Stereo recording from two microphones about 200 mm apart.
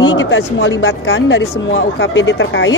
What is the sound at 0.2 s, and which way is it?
A woman's voice, 65° left (ahead or behind).